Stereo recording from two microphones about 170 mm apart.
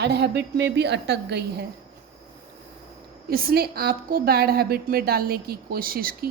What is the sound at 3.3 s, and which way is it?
A woman's voice, 60° right (ahead or behind).